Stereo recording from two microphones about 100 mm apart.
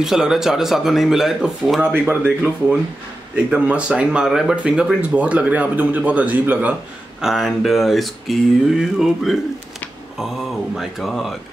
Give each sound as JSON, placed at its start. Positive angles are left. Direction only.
{"t": 0.0, "sound": "speech", "side_deg": -5}
{"t": 7.2, "sound": "speech", "side_deg": 0}
{"t": 10.8, "sound": "speech", "side_deg": 0}